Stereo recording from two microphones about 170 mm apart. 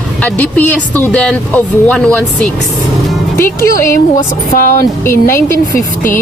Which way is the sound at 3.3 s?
15° left (ahead or behind).